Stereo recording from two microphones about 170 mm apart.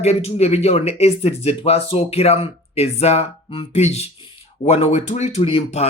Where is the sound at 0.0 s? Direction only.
40° left (ahead or behind).